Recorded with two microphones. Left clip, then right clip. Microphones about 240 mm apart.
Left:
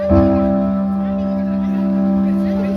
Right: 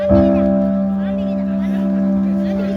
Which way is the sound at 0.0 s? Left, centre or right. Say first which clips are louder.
Right 1 dB; right.